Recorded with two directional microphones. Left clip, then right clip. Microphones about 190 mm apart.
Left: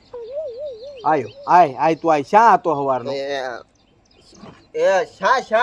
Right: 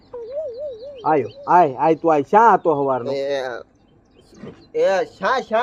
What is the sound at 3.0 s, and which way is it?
Speech, 25° left (ahead or behind).